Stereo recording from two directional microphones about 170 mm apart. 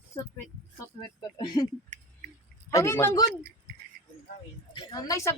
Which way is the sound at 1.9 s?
45° right (ahead or behind).